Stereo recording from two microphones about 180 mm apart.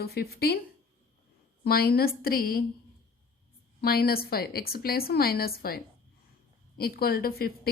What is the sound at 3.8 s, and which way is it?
A woman's voice, 60° left (ahead or behind).